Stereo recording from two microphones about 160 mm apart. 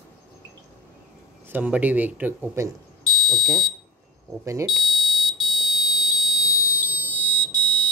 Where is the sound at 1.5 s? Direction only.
10° right (ahead or behind).